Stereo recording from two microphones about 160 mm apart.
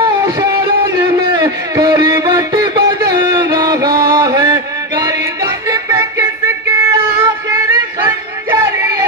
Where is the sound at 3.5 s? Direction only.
30° right (ahead or behind).